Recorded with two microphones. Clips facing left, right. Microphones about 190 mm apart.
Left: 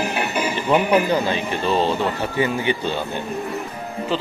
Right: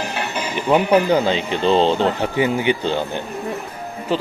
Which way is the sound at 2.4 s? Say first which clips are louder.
Right 2 dB; 15° right (ahead or behind).